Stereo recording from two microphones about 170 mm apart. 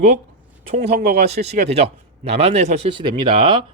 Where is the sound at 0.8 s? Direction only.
65° right (ahead or behind).